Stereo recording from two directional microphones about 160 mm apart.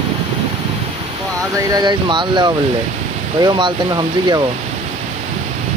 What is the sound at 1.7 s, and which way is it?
Speech, 25° right (ahead or behind).